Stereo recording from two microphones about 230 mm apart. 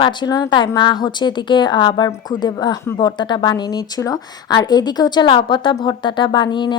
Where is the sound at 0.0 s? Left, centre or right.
Centre.